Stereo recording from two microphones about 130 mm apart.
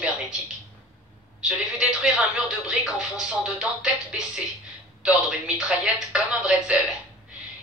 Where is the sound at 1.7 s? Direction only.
5° right (ahead or behind).